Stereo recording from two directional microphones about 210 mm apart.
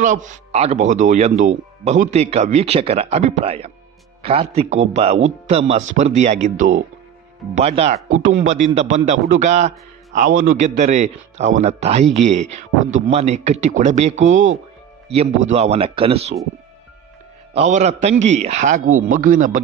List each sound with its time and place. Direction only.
0.0 s a man's voice: 35° right (ahead or behind)
17.6 s a man's voice: 35° right (ahead or behind)